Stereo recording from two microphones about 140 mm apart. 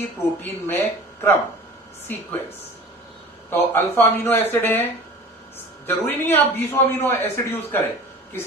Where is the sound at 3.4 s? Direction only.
15° left (ahead or behind).